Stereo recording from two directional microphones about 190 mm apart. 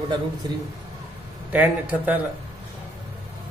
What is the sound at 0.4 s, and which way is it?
Speech, 20° right (ahead or behind).